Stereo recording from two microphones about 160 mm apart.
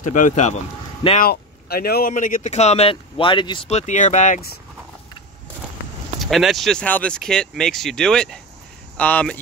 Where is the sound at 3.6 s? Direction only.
45° left (ahead or behind).